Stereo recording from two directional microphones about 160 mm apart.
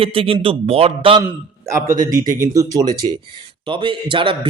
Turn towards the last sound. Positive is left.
turn(degrees=-30)  # may be behind; listen again after turning